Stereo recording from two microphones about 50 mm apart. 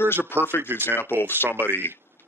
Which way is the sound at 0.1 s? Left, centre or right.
Left.